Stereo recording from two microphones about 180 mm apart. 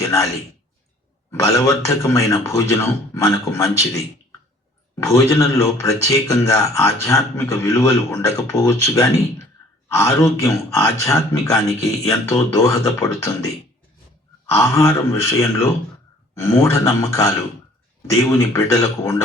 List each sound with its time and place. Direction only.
0.0 s a sound: 15° left (ahead or behind)
1.3 s speech: 15° left (ahead or behind)
5.3 s speech: 20° left (ahead or behind)
14.6 s speech: 15° left (ahead or behind)